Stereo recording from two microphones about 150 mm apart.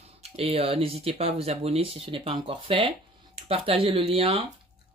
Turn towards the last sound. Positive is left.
turn(degrees=-40)  # may be behind; listen again after turning